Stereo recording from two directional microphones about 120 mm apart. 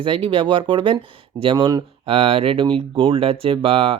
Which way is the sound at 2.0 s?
55° right (ahead or behind).